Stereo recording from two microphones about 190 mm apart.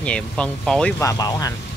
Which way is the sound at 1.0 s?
20° left (ahead or behind).